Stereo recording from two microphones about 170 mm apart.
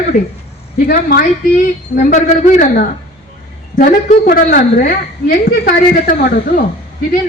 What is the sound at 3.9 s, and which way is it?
Speech, 60° left (ahead or behind).